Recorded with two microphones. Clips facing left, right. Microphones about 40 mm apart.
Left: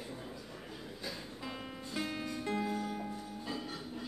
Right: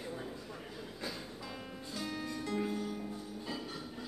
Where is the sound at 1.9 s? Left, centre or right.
Left.